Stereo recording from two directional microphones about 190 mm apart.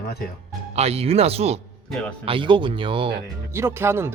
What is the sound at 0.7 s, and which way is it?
Speech, 35° right (ahead or behind).